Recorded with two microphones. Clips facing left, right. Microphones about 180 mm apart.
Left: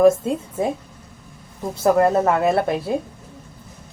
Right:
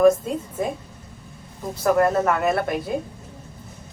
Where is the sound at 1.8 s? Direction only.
25° left (ahead or behind).